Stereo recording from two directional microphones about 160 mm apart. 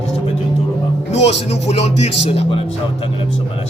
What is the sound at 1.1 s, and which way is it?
A man's voice, 45° left (ahead or behind).